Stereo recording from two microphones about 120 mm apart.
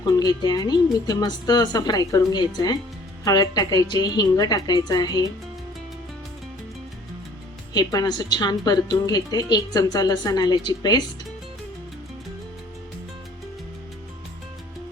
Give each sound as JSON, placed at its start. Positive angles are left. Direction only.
{"t": 0.0, "sound": "a woman's voice", "side_deg": 35}
{"t": 7.7, "sound": "a woman's voice", "side_deg": 35}